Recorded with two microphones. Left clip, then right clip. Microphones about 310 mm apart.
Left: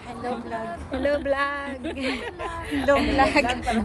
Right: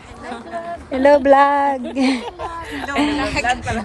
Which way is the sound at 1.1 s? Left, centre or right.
Right.